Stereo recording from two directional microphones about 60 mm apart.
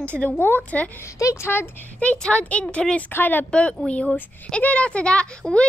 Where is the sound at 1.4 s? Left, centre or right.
Left.